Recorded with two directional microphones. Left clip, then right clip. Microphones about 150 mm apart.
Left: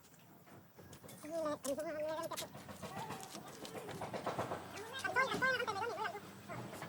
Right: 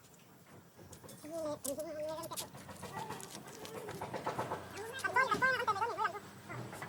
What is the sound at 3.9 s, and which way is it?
Vehicle, 25° right (ahead or behind).